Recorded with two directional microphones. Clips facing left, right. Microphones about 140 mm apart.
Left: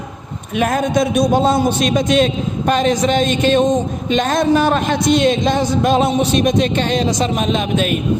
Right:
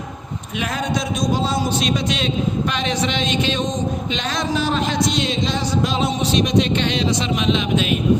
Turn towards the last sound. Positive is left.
turn(degrees=45)  # may be behind; listen again after turning